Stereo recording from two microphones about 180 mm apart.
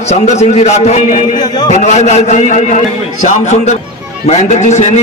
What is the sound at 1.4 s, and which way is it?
Speech, 25° left (ahead or behind).